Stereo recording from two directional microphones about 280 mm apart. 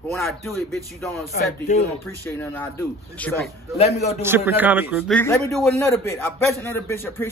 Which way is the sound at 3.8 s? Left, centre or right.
Left.